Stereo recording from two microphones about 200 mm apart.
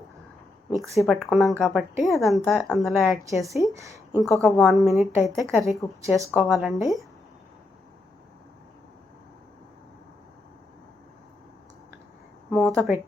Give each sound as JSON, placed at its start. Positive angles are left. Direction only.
{"t": 0.9, "sound": "a woman's voice", "side_deg": 0}
{"t": 3.7, "sound": "speech", "side_deg": -15}
{"t": 4.2, "sound": "a woman's voice", "side_deg": 0}
{"t": 12.5, "sound": "speech", "side_deg": 0}